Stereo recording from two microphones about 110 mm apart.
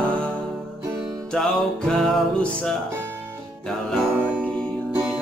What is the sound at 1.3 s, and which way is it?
Music, 5° left (ahead or behind).